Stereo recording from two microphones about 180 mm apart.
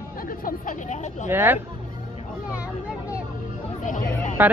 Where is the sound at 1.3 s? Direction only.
10° right (ahead or behind).